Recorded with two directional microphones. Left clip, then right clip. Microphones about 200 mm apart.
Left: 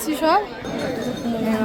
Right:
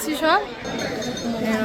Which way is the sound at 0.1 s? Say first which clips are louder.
Left 1 dB; 10° left (ahead or behind).